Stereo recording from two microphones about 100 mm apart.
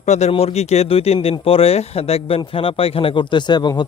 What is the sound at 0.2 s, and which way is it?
Speech, 80° left.